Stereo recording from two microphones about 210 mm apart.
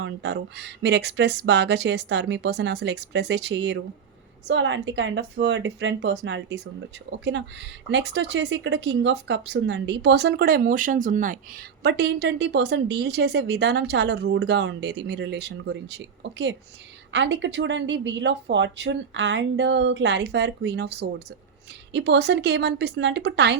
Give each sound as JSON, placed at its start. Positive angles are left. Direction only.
{"t": 0.0, "sound": "speech", "side_deg": -55}